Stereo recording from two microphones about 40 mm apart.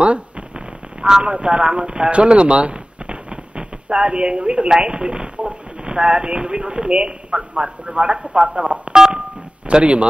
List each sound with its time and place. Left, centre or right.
1.0 s speech: right
8.9 s a man's voice: centre